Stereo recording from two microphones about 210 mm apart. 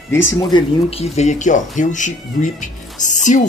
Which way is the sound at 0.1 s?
15° left (ahead or behind).